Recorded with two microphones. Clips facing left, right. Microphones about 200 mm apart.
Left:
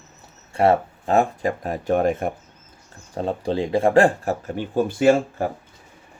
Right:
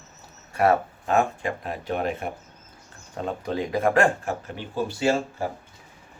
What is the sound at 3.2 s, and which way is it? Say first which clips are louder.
Speech: left 5 dB; 30° left (ahead or behind).